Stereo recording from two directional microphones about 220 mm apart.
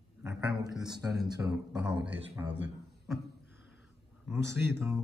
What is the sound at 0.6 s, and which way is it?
A man's voice, 15° right (ahead or behind).